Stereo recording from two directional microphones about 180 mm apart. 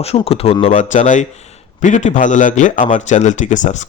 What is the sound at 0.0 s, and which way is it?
Speech, 35° left (ahead or behind).